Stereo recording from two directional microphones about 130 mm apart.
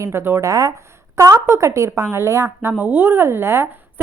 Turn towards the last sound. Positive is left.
turn(degrees=-20)  # may be behind; listen again after turning